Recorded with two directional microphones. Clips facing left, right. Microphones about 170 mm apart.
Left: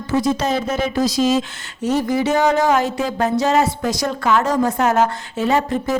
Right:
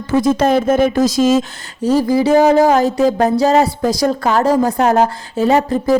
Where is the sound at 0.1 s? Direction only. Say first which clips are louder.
Right 6 dB; 50° right (ahead or behind).